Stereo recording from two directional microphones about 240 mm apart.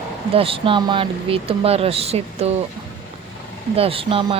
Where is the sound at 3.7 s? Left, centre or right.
Right.